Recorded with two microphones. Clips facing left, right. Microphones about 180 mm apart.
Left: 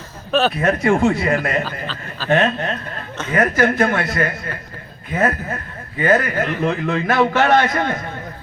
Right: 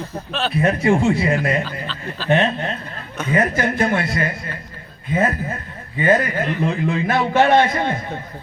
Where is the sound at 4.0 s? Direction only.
50° left (ahead or behind).